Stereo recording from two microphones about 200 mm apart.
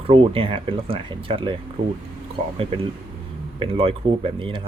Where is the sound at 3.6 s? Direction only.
25° right (ahead or behind).